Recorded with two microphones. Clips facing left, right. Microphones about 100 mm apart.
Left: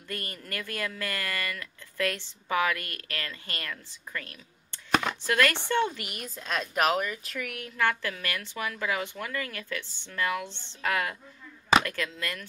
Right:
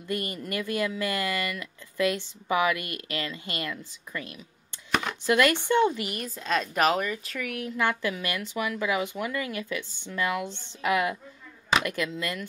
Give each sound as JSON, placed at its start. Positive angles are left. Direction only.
{"t": 0.1, "sound": "speech", "side_deg": -15}
{"t": 5.9, "sound": "a woman's voice", "side_deg": 0}
{"t": 7.7, "sound": "speech", "side_deg": -15}